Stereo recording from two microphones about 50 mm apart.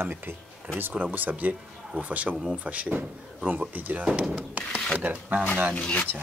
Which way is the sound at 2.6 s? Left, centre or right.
Right.